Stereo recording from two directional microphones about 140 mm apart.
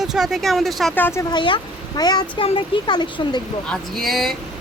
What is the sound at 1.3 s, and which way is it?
Speech, 35° left (ahead or behind).